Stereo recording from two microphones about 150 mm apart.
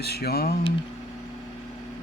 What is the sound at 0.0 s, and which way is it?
Speech, 90° left.